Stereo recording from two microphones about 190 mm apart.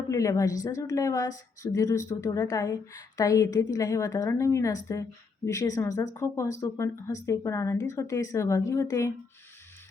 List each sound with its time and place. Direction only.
0.1 s a woman's voice: 15° left (ahead or behind)